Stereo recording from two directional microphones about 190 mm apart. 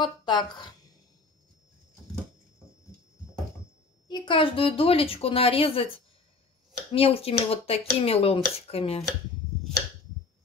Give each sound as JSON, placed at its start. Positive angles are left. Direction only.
{"t": 0.0, "sound": "a woman's voice", "side_deg": 25}
{"t": 4.1, "sound": "a woman's voice", "side_deg": 25}